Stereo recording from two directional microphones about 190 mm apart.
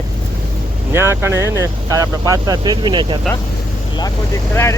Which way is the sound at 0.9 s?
15° right (ahead or behind).